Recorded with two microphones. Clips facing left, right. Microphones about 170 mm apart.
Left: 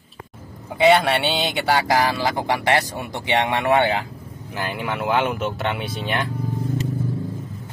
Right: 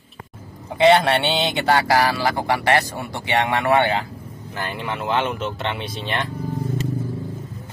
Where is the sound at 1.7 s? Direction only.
20° left (ahead or behind).